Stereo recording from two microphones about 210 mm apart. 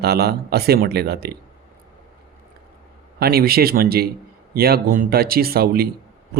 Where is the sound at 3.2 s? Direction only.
45° right (ahead or behind).